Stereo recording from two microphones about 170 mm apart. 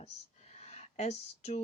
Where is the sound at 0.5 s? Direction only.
40° left (ahead or behind).